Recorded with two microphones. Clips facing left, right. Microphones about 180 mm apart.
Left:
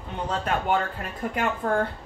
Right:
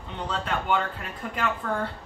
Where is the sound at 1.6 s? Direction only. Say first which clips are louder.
Left 5 dB; 35° left (ahead or behind).